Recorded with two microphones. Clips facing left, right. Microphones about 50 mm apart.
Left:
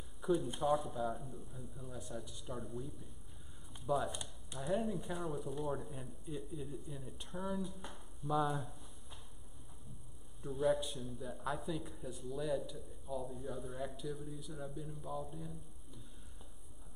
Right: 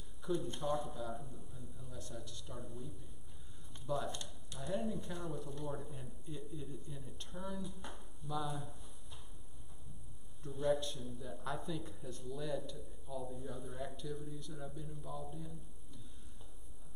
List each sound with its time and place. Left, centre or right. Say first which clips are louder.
0.2 s a man's voice: left 4 dB; centre
3.7 s a man's voice: left 3 dB; centre
8.3 s speech: left 6 dB; centre
8.5 s a sound: left 3 dB; centre
10.4 s a man's voice: left 1 dB; centre